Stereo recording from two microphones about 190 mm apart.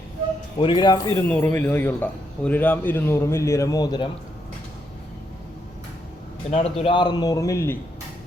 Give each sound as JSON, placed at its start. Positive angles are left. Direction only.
{"t": 0.6, "sound": "speech", "side_deg": 25}
{"t": 6.5, "sound": "speech", "side_deg": 30}